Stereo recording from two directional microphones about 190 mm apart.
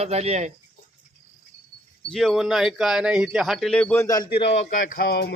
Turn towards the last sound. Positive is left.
turn(degrees=55)  # may be behind; listen again after turning